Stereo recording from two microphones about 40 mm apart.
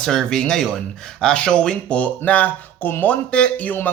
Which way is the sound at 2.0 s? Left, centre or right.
Left.